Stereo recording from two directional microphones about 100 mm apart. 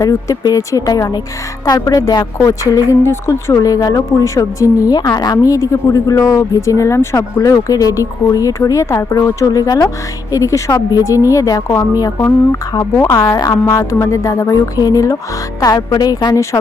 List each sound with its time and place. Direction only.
0.0 s speech: 35° left (ahead or behind)